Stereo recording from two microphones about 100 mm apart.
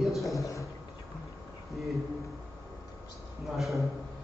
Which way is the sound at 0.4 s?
35° left (ahead or behind).